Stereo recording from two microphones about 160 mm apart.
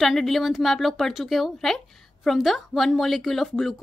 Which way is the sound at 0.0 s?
Centre (ahead or behind).